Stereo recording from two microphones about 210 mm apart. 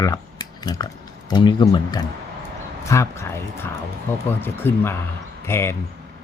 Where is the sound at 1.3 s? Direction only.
20° left (ahead or behind).